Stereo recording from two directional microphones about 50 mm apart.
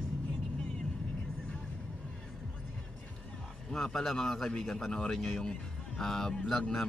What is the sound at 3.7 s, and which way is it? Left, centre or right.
Speech, centre.